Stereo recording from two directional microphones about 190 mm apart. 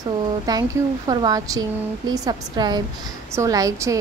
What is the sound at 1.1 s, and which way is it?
A woman's voice, 20° right (ahead or behind).